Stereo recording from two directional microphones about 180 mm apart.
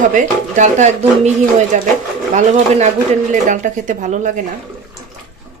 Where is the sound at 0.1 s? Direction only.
45° right (ahead or behind).